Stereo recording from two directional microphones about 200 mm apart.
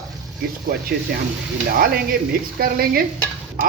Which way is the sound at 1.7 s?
45° right (ahead or behind).